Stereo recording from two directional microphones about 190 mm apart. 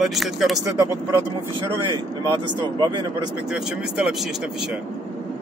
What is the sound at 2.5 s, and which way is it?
Speech, 25° right (ahead or behind).